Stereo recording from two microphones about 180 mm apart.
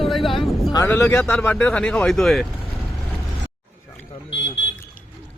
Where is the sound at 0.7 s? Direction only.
15° left (ahead or behind).